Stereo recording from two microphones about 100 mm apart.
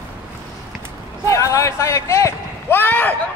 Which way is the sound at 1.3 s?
30° left (ahead or behind).